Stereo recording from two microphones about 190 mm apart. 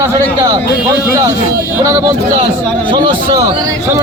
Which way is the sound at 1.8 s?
15° right (ahead or behind).